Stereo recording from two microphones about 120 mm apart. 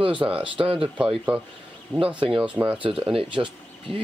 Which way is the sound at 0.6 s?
45° right (ahead or behind).